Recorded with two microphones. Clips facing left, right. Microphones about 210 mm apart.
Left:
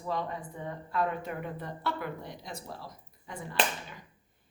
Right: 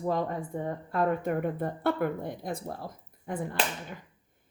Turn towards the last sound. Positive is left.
turn(degrees=-55)  # may be behind; listen again after turning